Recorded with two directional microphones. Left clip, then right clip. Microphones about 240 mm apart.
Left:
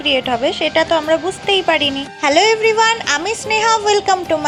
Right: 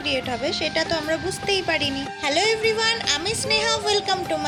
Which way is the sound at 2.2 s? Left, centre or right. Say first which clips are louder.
Left 9 dB; left.